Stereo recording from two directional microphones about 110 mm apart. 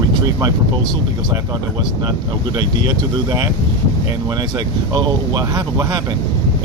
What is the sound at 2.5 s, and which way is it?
Speech, 45° right (ahead or behind).